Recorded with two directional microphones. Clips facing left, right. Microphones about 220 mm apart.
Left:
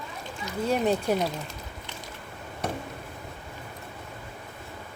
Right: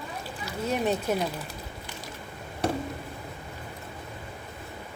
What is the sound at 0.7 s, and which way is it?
Speech, 10° left (ahead or behind).